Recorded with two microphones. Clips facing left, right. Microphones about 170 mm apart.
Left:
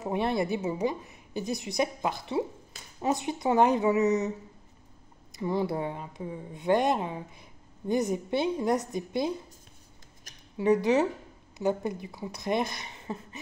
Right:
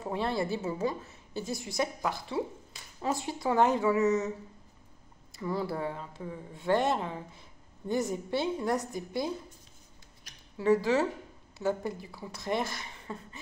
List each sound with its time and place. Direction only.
0.0 s a woman's voice: 20° left (ahead or behind)
5.3 s a woman's voice: 20° left (ahead or behind)
10.3 s a sound: 45° left (ahead or behind)
10.6 s a woman's voice: 20° left (ahead or behind)